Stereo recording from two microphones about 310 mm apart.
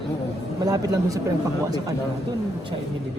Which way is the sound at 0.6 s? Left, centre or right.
Centre.